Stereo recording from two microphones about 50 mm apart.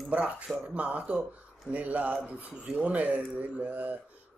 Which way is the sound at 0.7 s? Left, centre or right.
Right.